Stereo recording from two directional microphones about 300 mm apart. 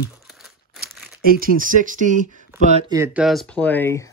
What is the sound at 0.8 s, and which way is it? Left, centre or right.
Speech, right.